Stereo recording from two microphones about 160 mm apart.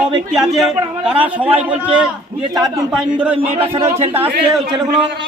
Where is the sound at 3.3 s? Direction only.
35° right (ahead or behind).